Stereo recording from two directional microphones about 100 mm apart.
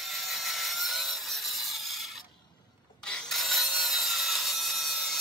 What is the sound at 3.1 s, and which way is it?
Wood, centre (ahead or behind).